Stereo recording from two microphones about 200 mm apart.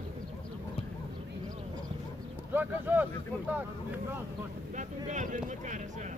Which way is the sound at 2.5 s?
10° right (ahead or behind).